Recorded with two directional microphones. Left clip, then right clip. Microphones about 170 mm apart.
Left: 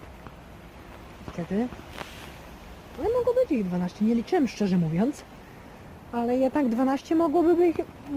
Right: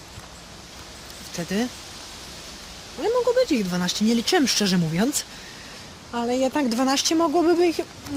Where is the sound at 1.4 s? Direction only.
20° right (ahead or behind).